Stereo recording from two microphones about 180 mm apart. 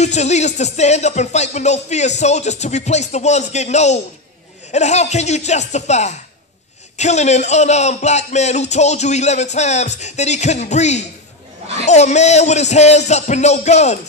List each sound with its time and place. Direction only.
0.0 s speech: 40° left (ahead or behind)